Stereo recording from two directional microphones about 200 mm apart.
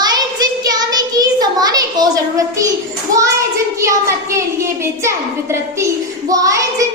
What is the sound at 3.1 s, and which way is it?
A child's voice, 15° right (ahead or behind).